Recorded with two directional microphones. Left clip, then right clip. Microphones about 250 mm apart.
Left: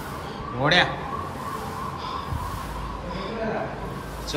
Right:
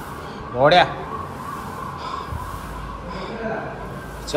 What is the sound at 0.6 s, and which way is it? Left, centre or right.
Speech, centre.